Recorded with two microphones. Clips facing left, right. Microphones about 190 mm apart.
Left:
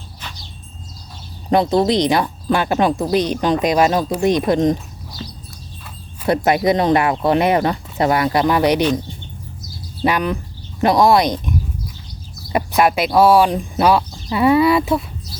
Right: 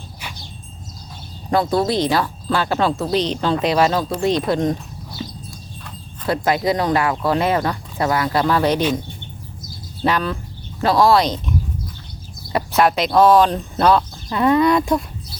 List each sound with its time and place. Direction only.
1.5 s speech: 20° left (ahead or behind)
6.2 s speech: 20° left (ahead or behind)
10.0 s speech: 15° left (ahead or behind)
12.5 s speech: 10° left (ahead or behind)